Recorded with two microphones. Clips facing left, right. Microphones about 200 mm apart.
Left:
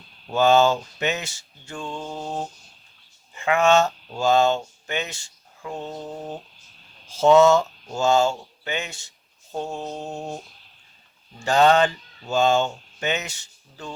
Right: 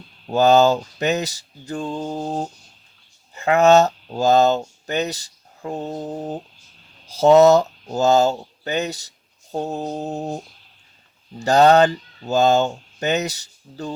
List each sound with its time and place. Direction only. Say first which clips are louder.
0.3 s speech: right 3 dB; 40° right (ahead or behind)
11.3 s speech: right 4 dB; 40° right (ahead or behind)